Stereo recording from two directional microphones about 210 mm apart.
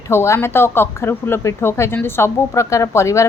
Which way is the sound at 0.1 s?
10° left (ahead or behind).